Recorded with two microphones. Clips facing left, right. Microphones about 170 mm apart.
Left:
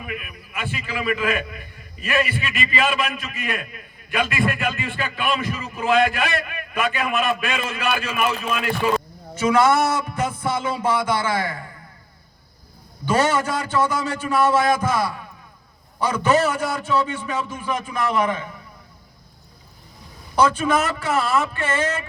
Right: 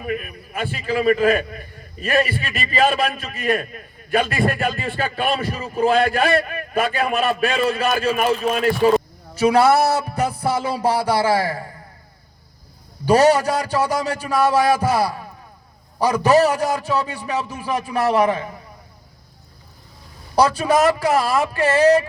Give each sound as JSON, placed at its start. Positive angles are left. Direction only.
{"t": 0.0, "sound": "a man's voice", "side_deg": -40}
{"t": 13.1, "sound": "a man's voice", "side_deg": -35}
{"t": 20.3, "sound": "a man's voice", "side_deg": -40}